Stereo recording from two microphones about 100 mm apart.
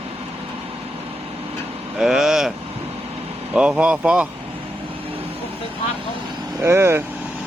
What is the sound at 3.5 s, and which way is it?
Speech, 10° right (ahead or behind).